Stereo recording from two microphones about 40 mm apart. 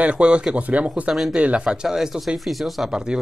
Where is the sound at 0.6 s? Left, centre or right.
Right.